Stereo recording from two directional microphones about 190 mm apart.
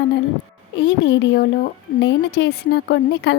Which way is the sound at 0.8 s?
65° left (ahead or behind).